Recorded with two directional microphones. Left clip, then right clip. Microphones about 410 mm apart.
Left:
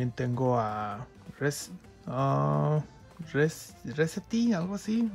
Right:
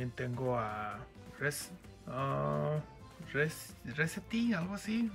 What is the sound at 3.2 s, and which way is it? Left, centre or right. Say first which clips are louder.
Speech: left 6 dB; centre.